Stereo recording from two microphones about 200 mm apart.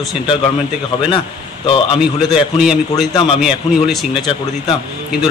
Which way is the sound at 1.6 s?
25° left (ahead or behind).